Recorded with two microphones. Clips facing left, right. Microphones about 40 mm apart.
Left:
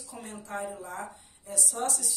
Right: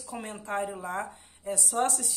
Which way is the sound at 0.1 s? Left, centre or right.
Right.